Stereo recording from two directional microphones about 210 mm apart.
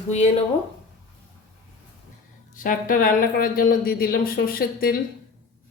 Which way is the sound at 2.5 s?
40° left (ahead or behind).